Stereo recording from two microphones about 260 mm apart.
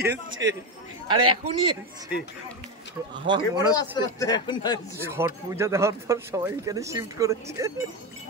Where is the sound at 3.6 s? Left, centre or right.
Centre.